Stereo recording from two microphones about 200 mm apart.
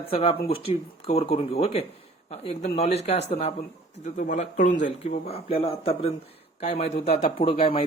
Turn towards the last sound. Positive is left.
turn(degrees=25)  # may be behind; listen again after turning